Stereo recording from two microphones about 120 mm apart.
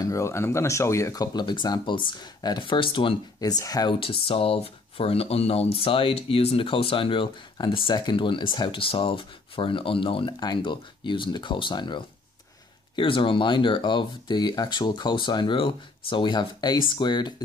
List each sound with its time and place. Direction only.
0.0 s speech: 25° left (ahead or behind); by 3.2 s 45° left (ahead or behind)
3.3 s speech: 30° left (ahead or behind)
4.0 s speech: 50° left (ahead or behind)